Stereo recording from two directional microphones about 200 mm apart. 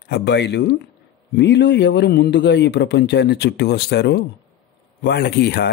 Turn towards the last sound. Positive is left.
turn(degrees=55)  # may be behind; listen again after turning